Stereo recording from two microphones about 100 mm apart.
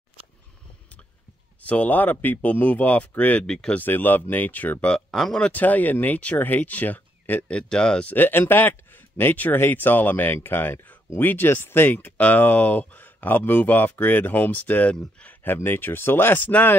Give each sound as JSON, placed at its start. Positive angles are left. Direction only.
{"t": 1.6, "sound": "speech", "side_deg": 15}